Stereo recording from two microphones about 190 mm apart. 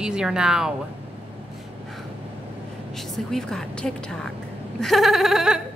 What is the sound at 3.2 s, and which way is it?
A woman's voice, centre (ahead or behind).